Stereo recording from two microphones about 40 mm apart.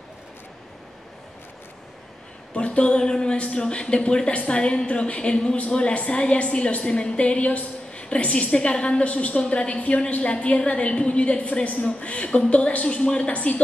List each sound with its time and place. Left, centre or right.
2.5 s a woman's voice: left